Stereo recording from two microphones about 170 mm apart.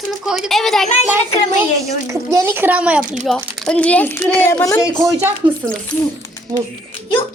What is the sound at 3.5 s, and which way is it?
Speech, 5° left (ahead or behind).